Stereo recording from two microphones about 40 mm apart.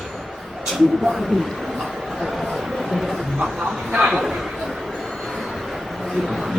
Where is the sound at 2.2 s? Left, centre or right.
Centre.